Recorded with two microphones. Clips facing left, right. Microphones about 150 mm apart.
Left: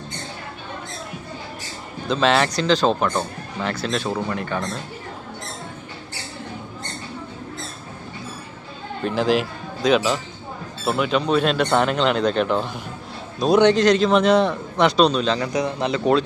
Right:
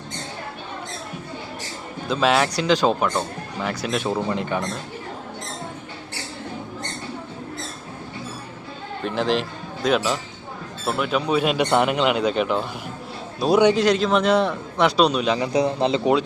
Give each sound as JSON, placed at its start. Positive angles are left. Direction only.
{"t": 2.0, "sound": "a man's voice", "side_deg": -5}
{"t": 3.1, "sound": "speech", "side_deg": 0}
{"t": 3.7, "sound": "a man's voice", "side_deg": -15}
{"t": 9.0, "sound": "a man's voice", "side_deg": 0}
{"t": 15.5, "sound": "speech", "side_deg": -30}